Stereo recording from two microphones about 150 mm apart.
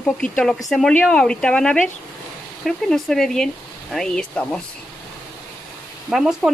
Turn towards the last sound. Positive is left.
turn(degrees=0)  # may be behind; listen again after turning